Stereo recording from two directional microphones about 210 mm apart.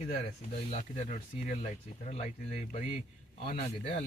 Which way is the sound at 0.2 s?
35° left (ahead or behind).